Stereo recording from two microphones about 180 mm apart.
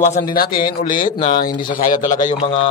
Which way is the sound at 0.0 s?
45° left (ahead or behind).